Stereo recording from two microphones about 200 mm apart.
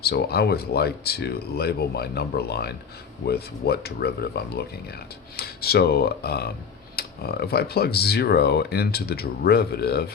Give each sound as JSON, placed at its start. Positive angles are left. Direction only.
{"t": 0.0, "sound": "speech", "side_deg": 55}